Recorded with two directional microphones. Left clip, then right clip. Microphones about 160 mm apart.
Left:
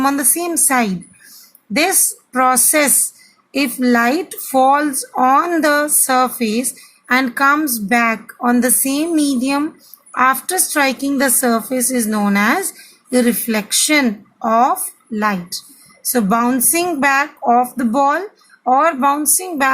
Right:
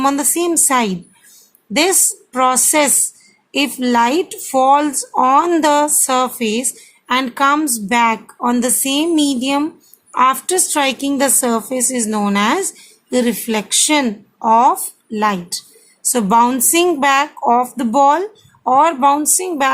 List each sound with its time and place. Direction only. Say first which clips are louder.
0.0 s a woman's voice: right 1 dB; 15° right (ahead or behind)
3.8 s a woman's voice: right 1 dB; 10° right (ahead or behind)
12.7 s a sound: left 1 dB; 10° right (ahead or behind)
13.8 s a woman's voice: left 1 dB; 10° right (ahead or behind)